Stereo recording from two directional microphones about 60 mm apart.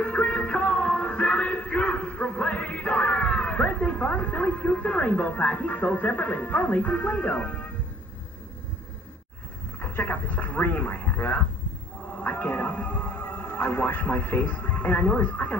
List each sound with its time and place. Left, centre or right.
0.0 s music: left
9.8 s speech: left